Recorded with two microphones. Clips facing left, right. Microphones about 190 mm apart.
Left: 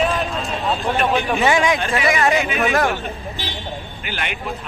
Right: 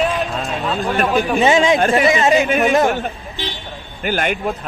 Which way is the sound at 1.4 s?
20° right (ahead or behind).